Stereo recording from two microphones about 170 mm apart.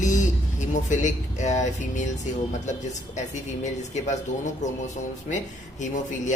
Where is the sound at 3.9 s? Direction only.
45° left (ahead or behind).